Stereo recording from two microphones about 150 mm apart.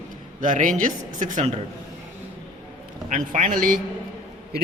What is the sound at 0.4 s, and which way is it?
Speech, 60° right (ahead or behind).